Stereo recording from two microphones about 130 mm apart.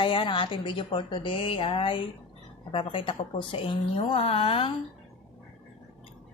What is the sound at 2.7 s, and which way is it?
Speech, 40° left (ahead or behind).